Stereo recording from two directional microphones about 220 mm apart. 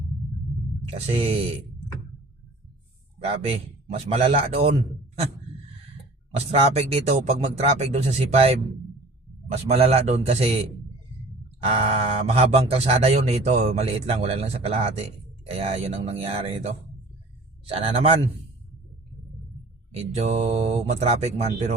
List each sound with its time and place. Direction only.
1.1 s speech: 25° right (ahead or behind)
3.4 s speech: 25° right (ahead or behind)
6.5 s speech: 30° right (ahead or behind)
9.6 s speech: 30° right (ahead or behind)
11.7 s speech: 25° right (ahead or behind)
17.7 s speech: 25° right (ahead or behind)
20.0 s speech: 30° right (ahead or behind)